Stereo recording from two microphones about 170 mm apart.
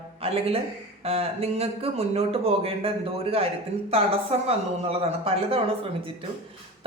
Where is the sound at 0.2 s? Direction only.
35° right (ahead or behind).